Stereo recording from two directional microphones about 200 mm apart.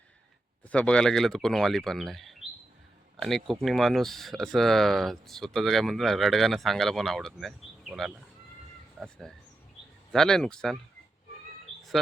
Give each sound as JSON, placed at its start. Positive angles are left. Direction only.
{"t": 0.7, "sound": "speech", "side_deg": 5}